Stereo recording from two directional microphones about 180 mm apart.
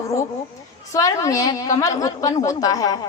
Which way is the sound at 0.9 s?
20° left (ahead or behind).